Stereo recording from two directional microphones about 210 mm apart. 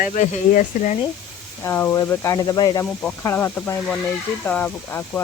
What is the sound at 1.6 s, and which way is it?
Speech, 10° left (ahead or behind).